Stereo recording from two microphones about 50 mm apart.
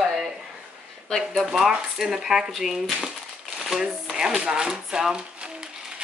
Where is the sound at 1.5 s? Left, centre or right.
Centre.